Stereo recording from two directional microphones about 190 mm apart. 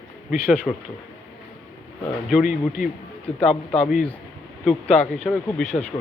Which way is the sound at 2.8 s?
50° left (ahead or behind).